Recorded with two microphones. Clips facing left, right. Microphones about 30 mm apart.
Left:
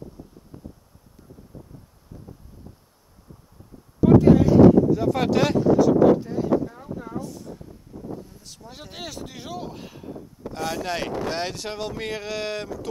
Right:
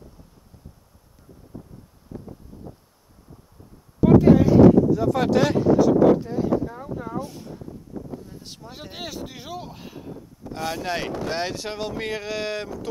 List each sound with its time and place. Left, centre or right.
2.1 s a sound: centre
4.0 s speech: centre
4.9 s speech: centre
5.5 s speech: centre
7.2 s speech: right
8.3 s a sound: right
8.5 s speech: centre